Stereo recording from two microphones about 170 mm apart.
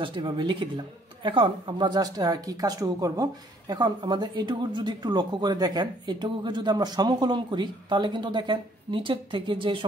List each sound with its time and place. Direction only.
0.0 s speech: 30° right (ahead or behind)